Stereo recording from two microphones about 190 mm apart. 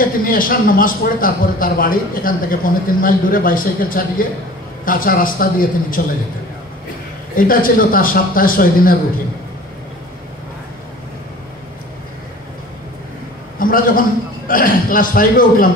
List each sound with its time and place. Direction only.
0.0 s speech: 45° left (ahead or behind)
7.3 s speech: 45° left (ahead or behind)
13.6 s speech: 45° left (ahead or behind)